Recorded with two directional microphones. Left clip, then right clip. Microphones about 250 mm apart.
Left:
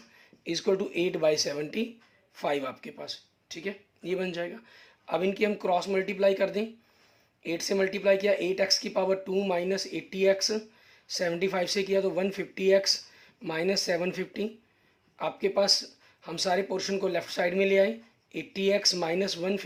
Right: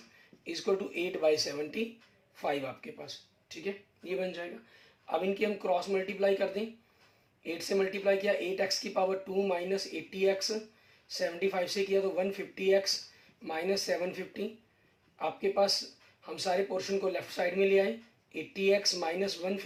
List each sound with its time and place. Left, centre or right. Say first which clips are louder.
0.4 s speech: left 4 dB; left